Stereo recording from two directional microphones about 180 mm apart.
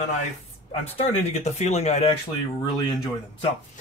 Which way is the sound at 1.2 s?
35° left (ahead or behind).